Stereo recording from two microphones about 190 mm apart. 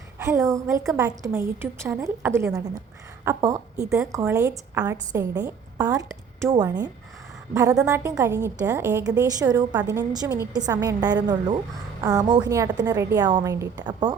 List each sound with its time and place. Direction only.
0.2 s a woman's voice: 15° right (ahead or behind)
3.8 s speech: 5° right (ahead or behind)
4.1 s a woman's voice: 15° right (ahead or behind)